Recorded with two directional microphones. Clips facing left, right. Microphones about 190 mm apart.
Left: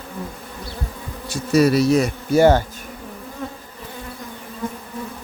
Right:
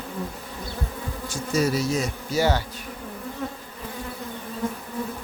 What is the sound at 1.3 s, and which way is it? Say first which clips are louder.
Bee: left 8 dB; 70° left (ahead or behind).